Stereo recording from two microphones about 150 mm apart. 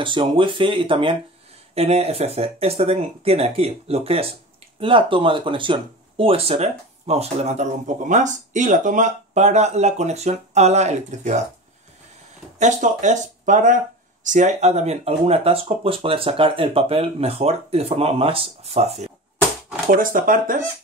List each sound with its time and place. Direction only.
0.0 s speech: 35° right (ahead or behind); by 11.4 s 50° right (ahead or behind)
12.5 s speech: 55° right (ahead or behind)
19.9 s speech: 65° right (ahead or behind)